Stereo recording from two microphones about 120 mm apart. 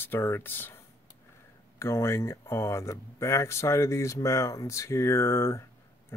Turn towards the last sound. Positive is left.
turn(degrees=20)  # may be behind; listen again after turning